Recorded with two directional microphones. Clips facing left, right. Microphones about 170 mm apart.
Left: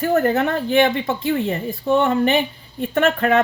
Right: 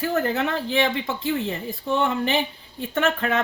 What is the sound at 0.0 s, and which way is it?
Speech, 55° left (ahead or behind).